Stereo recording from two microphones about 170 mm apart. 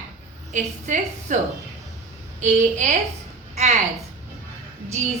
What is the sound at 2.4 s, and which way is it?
Speech, 45° right (ahead or behind).